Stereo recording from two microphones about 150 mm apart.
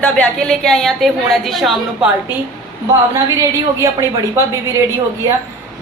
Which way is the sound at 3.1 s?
20° right (ahead or behind).